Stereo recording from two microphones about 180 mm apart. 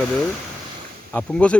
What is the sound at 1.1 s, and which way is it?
Speech, 5° left (ahead or behind).